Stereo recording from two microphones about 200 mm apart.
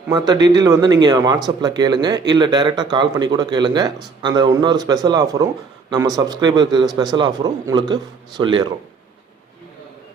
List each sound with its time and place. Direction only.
0.1 s speech: 20° right (ahead or behind)